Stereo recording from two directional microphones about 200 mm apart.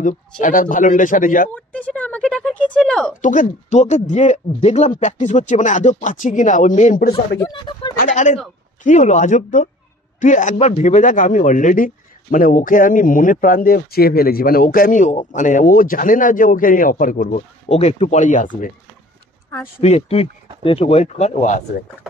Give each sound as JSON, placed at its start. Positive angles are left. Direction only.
{"t": 0.0, "sound": "a man's voice", "side_deg": 40}
{"t": 1.5, "sound": "a sound", "side_deg": 5}
{"t": 3.2, "sound": "a man's voice", "side_deg": 40}
{"t": 7.3, "sound": "speech", "side_deg": 20}
{"t": 8.0, "sound": "a man's voice", "side_deg": 40}
{"t": 19.8, "sound": "a man's voice", "side_deg": 30}